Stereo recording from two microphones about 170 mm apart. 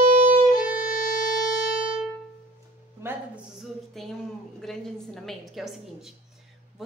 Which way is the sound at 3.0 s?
5° right (ahead or behind).